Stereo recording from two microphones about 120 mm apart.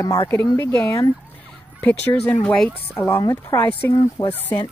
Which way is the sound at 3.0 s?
25° left (ahead or behind).